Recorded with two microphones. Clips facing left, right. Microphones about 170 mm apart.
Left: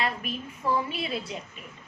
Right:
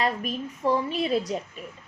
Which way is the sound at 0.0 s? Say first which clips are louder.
Right 4 dB; 40° right (ahead or behind).